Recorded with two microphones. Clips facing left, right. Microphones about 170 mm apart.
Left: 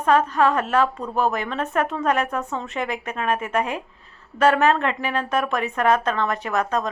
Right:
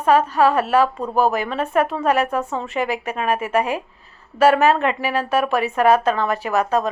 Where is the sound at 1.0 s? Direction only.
35° right (ahead or behind).